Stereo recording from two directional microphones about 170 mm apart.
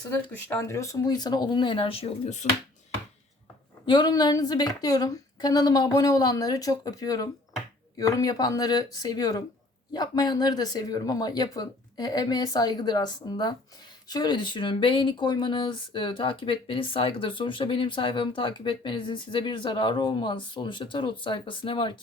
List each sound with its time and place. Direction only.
0.4 s speech: 15° left (ahead or behind); by 2.5 s 40° left (ahead or behind)
3.8 s speech: 25° left (ahead or behind)